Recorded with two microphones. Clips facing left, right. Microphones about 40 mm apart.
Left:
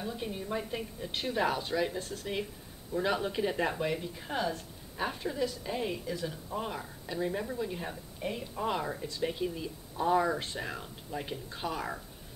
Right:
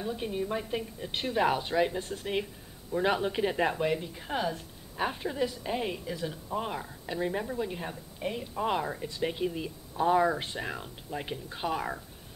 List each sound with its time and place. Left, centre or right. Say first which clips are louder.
0.0 s a woman's voice: right 4 dB; centre